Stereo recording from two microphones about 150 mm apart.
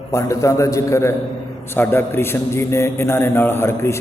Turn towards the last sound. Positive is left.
turn(degrees=15)  # may be behind; listen again after turning